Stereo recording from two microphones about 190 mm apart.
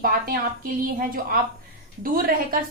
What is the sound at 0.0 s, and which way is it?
Speech, 50° right (ahead or behind).